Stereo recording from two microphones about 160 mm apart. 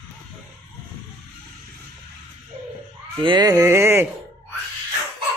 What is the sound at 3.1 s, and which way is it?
Speech, 30° right (ahead or behind).